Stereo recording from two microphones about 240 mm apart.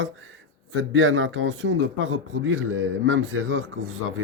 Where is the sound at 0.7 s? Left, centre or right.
Right.